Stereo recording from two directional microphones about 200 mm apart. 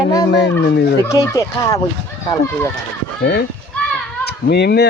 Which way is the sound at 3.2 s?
55° left (ahead or behind).